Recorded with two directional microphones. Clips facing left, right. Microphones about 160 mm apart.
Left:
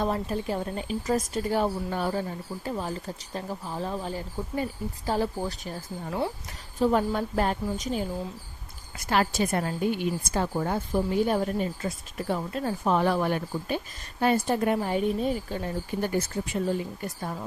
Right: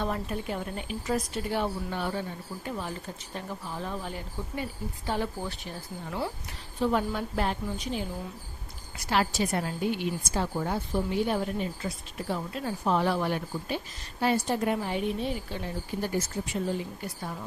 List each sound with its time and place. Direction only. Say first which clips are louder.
0.0 s speech: left 4 dB; 35° left (ahead or behind)
6.1 s speech: left 4 dB; 25° left (ahead or behind)
6.7 s a woman's voice: left 3 dB; 40° left (ahead or behind)
9.0 s a woman's voice: left 2 dB; 50° left (ahead or behind)